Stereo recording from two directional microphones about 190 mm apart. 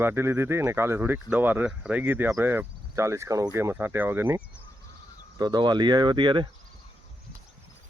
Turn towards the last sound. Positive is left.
turn(degrees=-25)  # may be behind; listen again after turning